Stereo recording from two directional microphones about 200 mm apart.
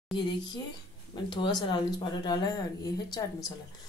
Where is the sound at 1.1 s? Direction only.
20° left (ahead or behind).